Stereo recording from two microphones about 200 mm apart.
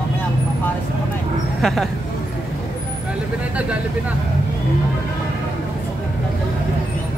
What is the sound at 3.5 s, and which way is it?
Speech, 5° right (ahead or behind).